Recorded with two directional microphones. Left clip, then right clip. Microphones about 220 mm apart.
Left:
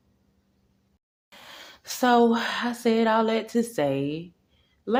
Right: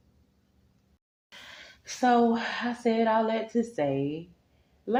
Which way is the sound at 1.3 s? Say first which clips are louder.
Left 2 dB; 25° left (ahead or behind).